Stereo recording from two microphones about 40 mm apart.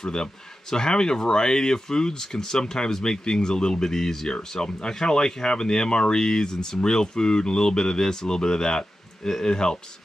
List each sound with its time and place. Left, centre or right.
0.0 s speech: centre